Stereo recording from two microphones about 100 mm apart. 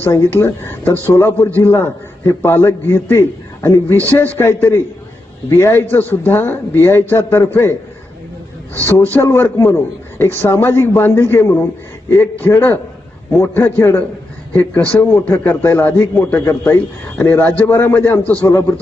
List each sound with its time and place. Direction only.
0.1 s a man's voice: 25° left (ahead or behind)
3.9 s a man's voice: 15° left (ahead or behind)
8.9 s a man's voice: 20° left (ahead or behind)